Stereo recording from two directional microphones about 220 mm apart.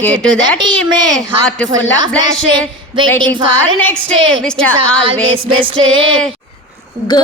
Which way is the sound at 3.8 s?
5° left (ahead or behind).